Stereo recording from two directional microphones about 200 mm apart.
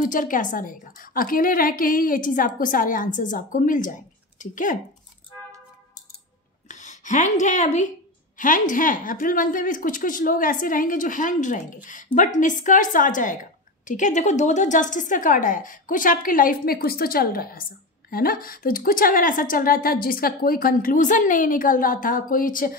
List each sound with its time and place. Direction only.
0.0 s speech: 40° left (ahead or behind)
6.7 s speech: 35° left (ahead or behind)